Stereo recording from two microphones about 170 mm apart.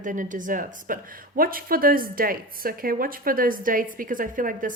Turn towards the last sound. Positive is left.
turn(degrees=-50)  # may be behind; listen again after turning